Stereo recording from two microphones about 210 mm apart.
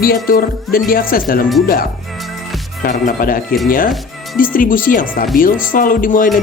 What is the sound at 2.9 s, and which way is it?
Speech, 40° left (ahead or behind).